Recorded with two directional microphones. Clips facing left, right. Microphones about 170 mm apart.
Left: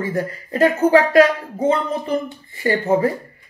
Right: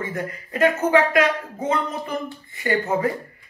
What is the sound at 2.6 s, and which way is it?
Speech, 30° left (ahead or behind).